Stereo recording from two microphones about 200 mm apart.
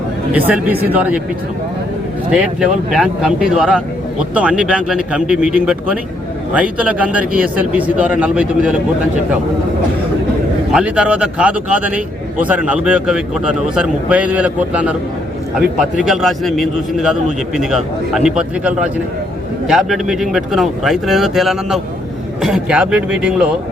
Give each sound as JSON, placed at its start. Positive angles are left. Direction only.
{"t": 0.3, "sound": "a man's voice", "side_deg": -10}
{"t": 2.3, "sound": "a man's voice", "side_deg": -5}
{"t": 10.7, "sound": "a man's voice", "side_deg": -5}
{"t": 16.0, "sound": "speech", "side_deg": 0}